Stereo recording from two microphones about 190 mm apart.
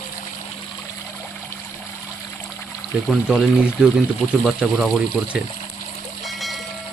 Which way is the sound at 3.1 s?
5° right (ahead or behind).